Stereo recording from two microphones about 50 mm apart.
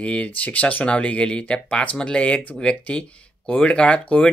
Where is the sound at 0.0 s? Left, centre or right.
Left.